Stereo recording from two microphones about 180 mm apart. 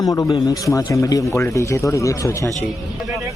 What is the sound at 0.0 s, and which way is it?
Speech, 20° left (ahead or behind).